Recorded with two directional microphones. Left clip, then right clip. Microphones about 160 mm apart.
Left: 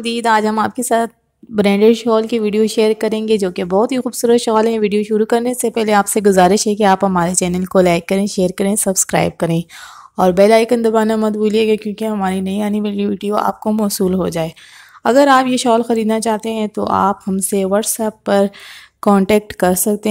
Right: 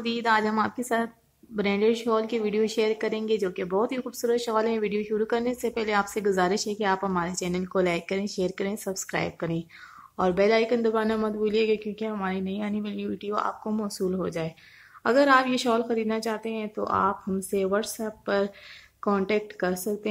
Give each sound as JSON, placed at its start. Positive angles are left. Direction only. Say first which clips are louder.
{"t": 0.0, "sound": "a woman's voice", "louder": "left 10 dB", "side_deg": 55}